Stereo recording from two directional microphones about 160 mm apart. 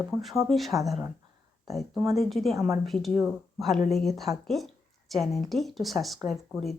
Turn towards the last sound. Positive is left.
turn(degrees=0)  # may be behind; listen again after turning